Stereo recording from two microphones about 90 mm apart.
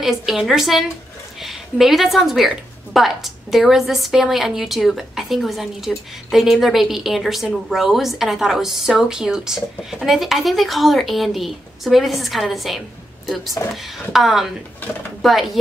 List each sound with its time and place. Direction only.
0.0 s a woman's voice: 5° right (ahead or behind)
13.6 s speech: 35° left (ahead or behind)
13.9 s a woman's voice: centre (ahead or behind)